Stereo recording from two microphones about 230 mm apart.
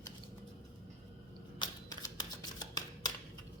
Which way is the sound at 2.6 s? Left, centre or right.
Centre.